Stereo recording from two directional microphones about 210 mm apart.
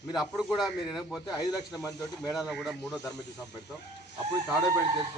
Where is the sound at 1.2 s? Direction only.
20° left (ahead or behind).